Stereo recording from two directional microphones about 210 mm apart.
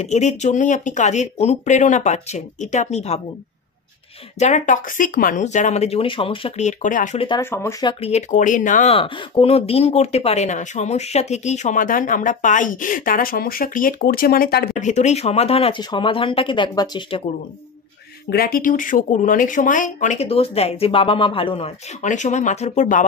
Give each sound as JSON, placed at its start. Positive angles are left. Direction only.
{"t": 0.0, "sound": "speech", "side_deg": 35}
{"t": 4.4, "sound": "speech", "side_deg": 35}
{"t": 6.8, "sound": "speech", "side_deg": 40}
{"t": 7.2, "sound": "speech", "side_deg": 20}
{"t": 8.0, "sound": "speech", "side_deg": 35}
{"t": 8.9, "sound": "speech", "side_deg": 25}
{"t": 18.3, "sound": "speech", "side_deg": 45}